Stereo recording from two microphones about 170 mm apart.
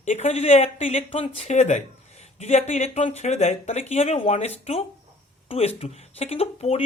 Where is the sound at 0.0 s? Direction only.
45° left (ahead or behind).